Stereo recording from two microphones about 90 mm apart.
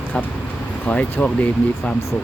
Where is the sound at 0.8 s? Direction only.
15° left (ahead or behind).